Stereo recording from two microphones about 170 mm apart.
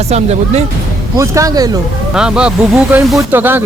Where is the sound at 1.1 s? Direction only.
20° right (ahead or behind).